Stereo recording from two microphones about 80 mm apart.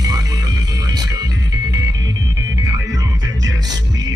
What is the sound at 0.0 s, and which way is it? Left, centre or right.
Music, right.